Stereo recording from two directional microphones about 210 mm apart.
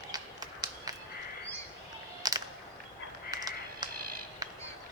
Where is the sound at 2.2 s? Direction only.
20° right (ahead or behind).